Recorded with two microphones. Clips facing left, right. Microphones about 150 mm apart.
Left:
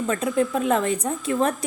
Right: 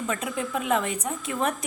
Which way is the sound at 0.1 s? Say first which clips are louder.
Left 8 dB; 35° left (ahead or behind).